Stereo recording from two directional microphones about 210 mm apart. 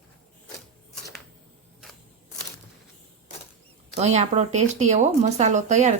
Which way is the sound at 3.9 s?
30° right (ahead or behind).